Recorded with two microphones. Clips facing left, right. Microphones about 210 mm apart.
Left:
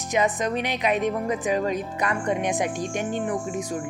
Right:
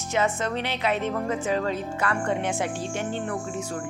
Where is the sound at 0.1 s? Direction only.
15° left (ahead or behind).